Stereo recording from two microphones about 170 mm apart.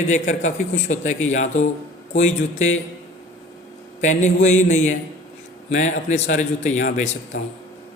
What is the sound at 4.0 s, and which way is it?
A man's voice, 45° left (ahead or behind).